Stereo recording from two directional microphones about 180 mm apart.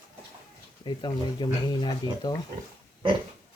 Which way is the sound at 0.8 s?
25° left (ahead or behind).